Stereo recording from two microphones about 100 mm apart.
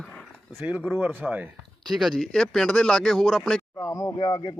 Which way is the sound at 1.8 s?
Centre (ahead or behind).